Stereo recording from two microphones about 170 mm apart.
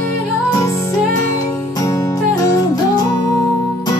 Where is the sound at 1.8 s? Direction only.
20° left (ahead or behind).